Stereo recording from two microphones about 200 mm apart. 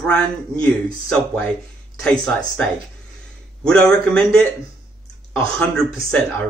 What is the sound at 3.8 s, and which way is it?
Speech, 5° left (ahead or behind).